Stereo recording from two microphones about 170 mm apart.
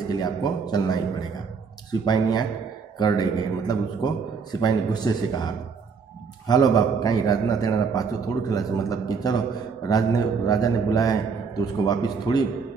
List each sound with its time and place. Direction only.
0.1 s a man's voice: 25° left (ahead or behind)